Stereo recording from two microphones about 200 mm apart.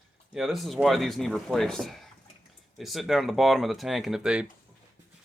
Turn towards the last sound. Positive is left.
turn(degrees=-5)  # may be behind; listen again after turning